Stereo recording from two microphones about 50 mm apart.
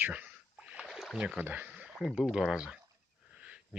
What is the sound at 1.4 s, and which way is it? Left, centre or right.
Speech, right.